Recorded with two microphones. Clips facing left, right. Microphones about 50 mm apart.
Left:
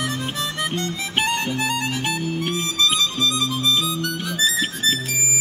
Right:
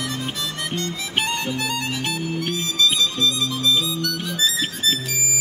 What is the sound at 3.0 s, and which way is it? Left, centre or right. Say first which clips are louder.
Music: even; centre.